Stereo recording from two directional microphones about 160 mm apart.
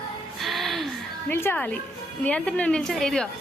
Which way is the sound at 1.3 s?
15° left (ahead or behind).